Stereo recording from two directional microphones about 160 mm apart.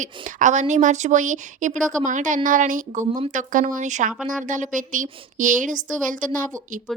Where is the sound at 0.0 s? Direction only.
50° right (ahead or behind).